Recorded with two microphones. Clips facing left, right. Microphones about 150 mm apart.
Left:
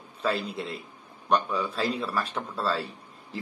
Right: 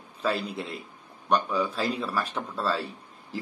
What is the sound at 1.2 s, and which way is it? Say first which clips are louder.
A man's voice: right 1 dB; 5° right (ahead or behind).